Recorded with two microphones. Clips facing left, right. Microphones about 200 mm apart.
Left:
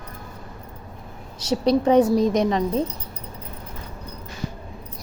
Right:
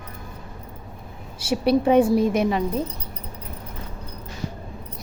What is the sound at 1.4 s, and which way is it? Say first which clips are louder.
A woman's voice: even; 10° right (ahead or behind).